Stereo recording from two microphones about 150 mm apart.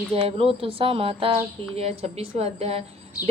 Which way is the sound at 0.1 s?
40° right (ahead or behind).